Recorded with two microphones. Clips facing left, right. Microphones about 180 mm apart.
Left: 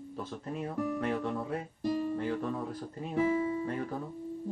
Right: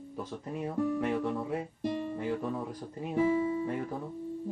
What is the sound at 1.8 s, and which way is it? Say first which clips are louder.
Music: left 5 dB; 25° right (ahead or behind).